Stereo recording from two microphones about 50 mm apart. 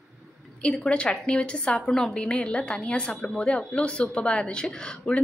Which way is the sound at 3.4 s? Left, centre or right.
Left.